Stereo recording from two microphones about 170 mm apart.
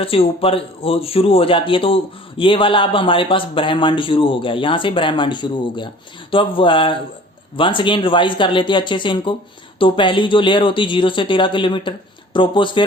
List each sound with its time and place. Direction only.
0.0 s a man's voice: 35° left (ahead or behind)